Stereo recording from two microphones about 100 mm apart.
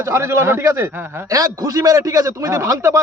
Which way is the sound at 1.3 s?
35° right (ahead or behind).